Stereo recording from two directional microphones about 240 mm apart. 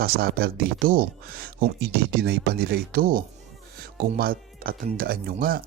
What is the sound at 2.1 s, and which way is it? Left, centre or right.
Speech, right.